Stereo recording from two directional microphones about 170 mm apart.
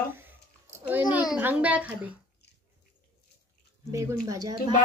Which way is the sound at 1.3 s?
10° right (ahead or behind).